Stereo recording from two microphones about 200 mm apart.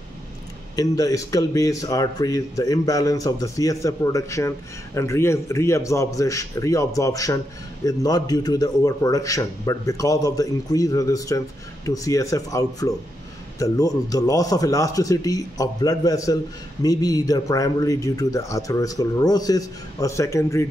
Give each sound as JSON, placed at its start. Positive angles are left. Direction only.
{"t": 0.7, "sound": "speech", "side_deg": 20}